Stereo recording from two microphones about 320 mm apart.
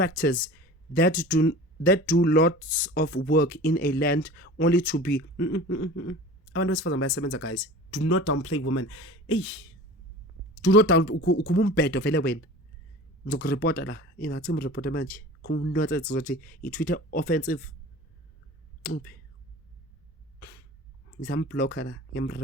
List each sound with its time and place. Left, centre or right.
1.3 s speech: left
10.7 s speech: left
13.4 s speech: left
21.2 s speech: left